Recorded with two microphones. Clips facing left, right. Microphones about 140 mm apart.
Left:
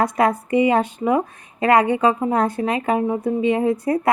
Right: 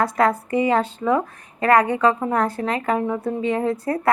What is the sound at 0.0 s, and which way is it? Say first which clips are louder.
A woman's voice: left 1 dB; 20° left (ahead or behind).